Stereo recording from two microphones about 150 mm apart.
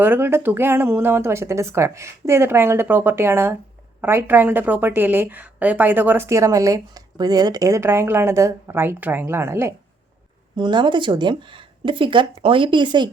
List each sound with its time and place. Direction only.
0.0 s a woman's voice: 15° right (ahead or behind)
10.6 s speech: 30° right (ahead or behind)